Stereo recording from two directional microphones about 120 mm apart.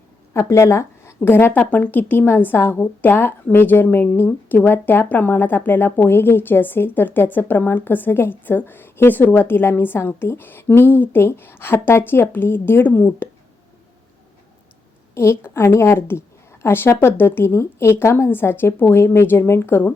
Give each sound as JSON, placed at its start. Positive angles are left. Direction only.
{"t": 0.3, "sound": "a woman's voice", "side_deg": 25}
{"t": 15.1, "sound": "a woman's voice", "side_deg": 20}